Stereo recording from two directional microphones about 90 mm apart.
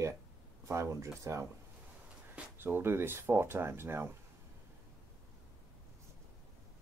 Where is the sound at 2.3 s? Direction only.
25° right (ahead or behind).